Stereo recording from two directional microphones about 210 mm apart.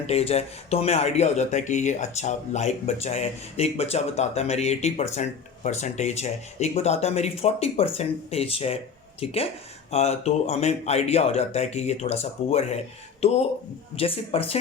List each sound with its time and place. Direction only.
0.1 s speech: 30° left (ahead or behind)